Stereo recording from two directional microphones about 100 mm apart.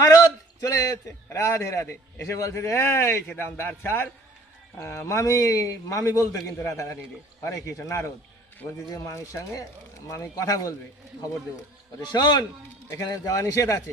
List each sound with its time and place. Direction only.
0.0 s a man's voice: 35° left (ahead or behind)
12.1 s speech: 45° left (ahead or behind)